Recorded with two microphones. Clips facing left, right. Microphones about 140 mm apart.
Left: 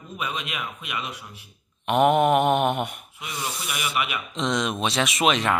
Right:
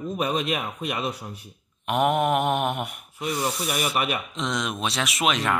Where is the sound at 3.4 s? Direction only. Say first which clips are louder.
Right 3 dB; 40° right (ahead or behind).